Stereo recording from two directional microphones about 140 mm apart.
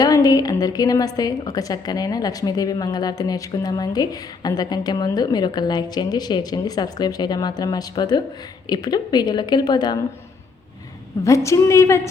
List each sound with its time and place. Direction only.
0.0 s a woman's voice: 25° left (ahead or behind)
11.2 s a woman's voice: 20° left (ahead or behind)